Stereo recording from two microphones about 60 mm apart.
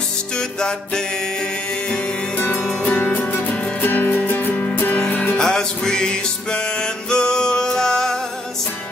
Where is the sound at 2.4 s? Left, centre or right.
Left.